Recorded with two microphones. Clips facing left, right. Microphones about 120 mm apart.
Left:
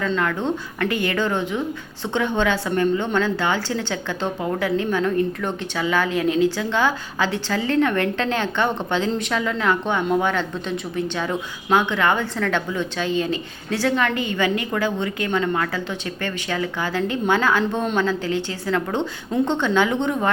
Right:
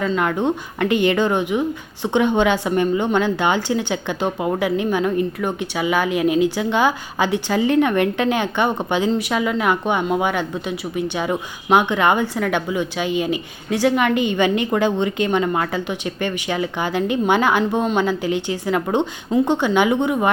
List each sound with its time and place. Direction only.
0.2 s a woman's voice: 15° right (ahead or behind)